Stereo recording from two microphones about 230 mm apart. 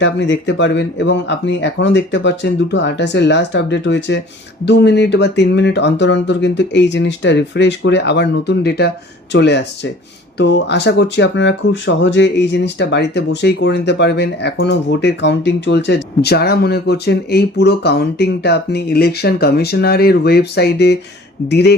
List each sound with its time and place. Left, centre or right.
0.0 s speech: left